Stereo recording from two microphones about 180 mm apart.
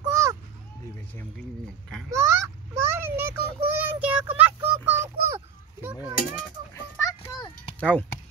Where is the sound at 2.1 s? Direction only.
15° right (ahead or behind).